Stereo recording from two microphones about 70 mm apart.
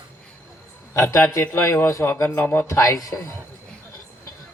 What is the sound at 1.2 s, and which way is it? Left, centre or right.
A man's voice, left.